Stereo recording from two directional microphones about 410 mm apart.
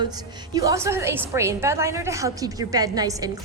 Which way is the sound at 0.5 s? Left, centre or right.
Centre.